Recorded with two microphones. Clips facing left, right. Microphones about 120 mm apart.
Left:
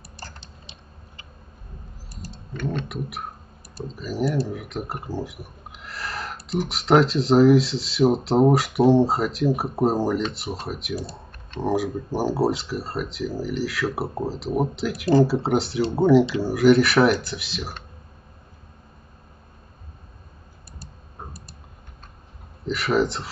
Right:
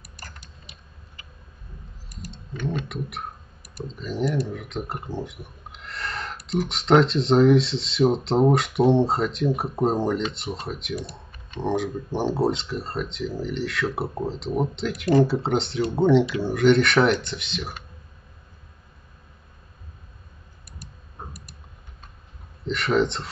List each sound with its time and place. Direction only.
0.2 s tick-tock: 30° left (ahead or behind)
2.3 s typing: centre (ahead or behind)
3.8 s speech: 5° left (ahead or behind)
20.8 s typing: 30° left (ahead or behind)
22.7 s speech: 5° left (ahead or behind)